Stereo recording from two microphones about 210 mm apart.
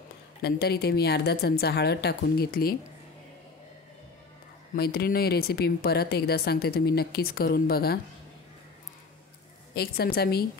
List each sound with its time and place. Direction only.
0.4 s speech: 50° left (ahead or behind)
4.7 s speech: 45° left (ahead or behind)
9.8 s speech: 45° left (ahead or behind)